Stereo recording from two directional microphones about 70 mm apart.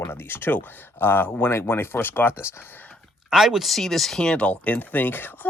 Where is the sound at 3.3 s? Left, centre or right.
Centre.